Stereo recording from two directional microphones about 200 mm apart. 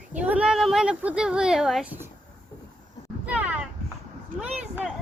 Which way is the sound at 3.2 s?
5° right (ahead or behind).